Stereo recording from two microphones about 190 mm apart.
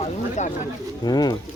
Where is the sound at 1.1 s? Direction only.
20° left (ahead or behind).